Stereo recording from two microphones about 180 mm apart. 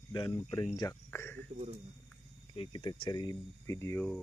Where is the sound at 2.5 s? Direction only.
30° left (ahead or behind).